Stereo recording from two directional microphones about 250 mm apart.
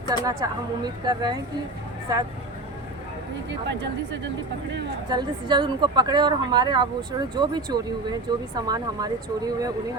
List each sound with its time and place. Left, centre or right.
0.1 s speech: centre
3.7 s speech: right
5.0 s speech: centre